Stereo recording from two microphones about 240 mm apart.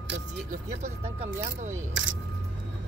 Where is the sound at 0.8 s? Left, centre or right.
Right.